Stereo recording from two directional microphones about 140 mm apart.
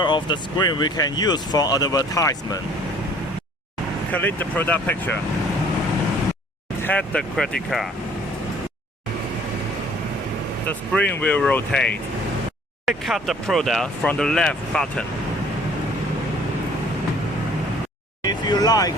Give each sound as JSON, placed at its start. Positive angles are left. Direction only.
{"t": 0.0, "sound": "speech", "side_deg": 35}
{"t": 4.1, "sound": "speech", "side_deg": 10}
{"t": 6.8, "sound": "speech", "side_deg": 10}
{"t": 10.7, "sound": "speech", "side_deg": 10}
{"t": 12.8, "sound": "speech", "side_deg": 0}
{"t": 18.2, "sound": "speech", "side_deg": 30}